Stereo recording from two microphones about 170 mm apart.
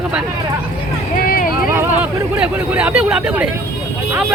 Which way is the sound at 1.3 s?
60° left (ahead or behind).